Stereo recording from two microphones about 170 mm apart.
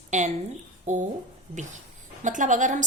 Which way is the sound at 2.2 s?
45° right (ahead or behind).